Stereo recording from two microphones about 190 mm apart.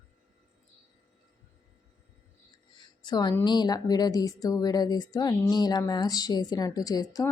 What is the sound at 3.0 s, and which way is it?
A woman's voice, 20° left (ahead or behind).